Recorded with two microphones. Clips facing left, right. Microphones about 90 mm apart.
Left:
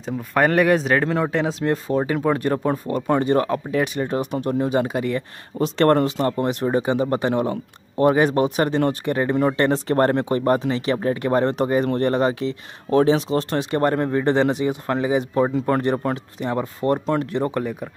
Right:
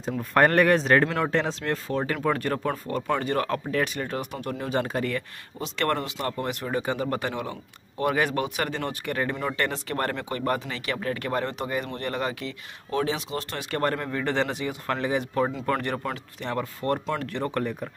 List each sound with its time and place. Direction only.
0.0 s speech: 5° left (ahead or behind)
5.6 s speech: 40° left (ahead or behind)
13.7 s speech: 20° left (ahead or behind)
16.3 s speech: 20° left (ahead or behind)
17.0 s speech: 30° left (ahead or behind)
17.3 s speech: 15° left (ahead or behind)